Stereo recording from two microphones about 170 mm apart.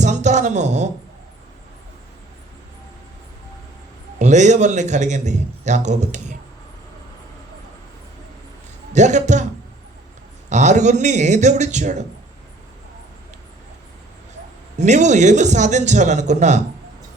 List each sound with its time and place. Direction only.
0.0 s a sound: 45° right (ahead or behind)
4.2 s a man's voice: 45° right (ahead or behind)
8.9 s a man's voice: 45° right (ahead or behind)
10.5 s a man's voice: 45° right (ahead or behind)
14.8 s a man's voice: 45° right (ahead or behind)